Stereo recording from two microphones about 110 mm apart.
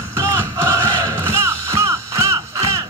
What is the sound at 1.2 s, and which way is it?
Music, 25° right (ahead or behind).